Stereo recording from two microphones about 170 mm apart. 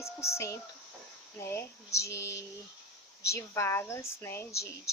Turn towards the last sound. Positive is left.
turn(degrees=15)  # may be behind; listen again after turning